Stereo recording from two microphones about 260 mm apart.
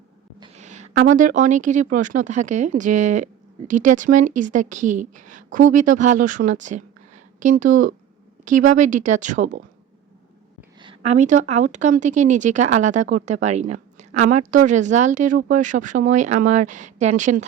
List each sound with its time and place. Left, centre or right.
0.3 s a sound: right
1.0 s a woman's voice: right
10.8 s a woman's voice: right